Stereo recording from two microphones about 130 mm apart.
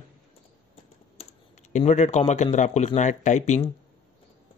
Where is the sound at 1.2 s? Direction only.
60° left (ahead or behind).